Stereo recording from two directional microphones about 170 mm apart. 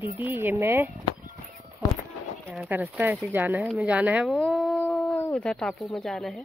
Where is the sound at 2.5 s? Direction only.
10° right (ahead or behind).